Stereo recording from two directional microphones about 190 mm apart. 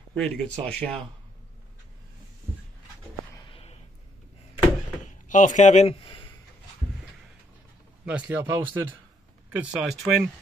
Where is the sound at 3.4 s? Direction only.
30° left (ahead or behind).